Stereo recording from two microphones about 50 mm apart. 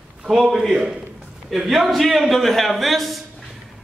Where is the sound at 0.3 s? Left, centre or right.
Centre.